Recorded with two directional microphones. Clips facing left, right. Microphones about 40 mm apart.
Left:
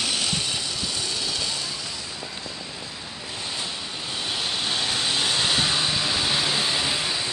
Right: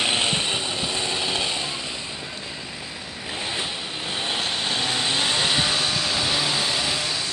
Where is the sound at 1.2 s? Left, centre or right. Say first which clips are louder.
Right 4 dB; right.